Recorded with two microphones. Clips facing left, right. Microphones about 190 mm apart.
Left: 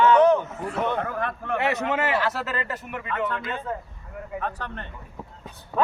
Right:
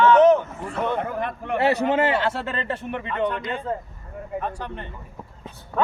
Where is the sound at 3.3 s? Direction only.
15° right (ahead or behind).